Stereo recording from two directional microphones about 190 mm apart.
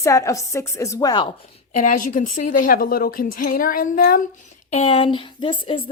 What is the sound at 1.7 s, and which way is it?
A woman's voice, 40° left (ahead or behind).